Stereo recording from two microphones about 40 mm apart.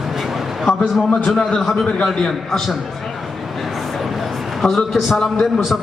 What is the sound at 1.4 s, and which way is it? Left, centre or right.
A man's voice, centre.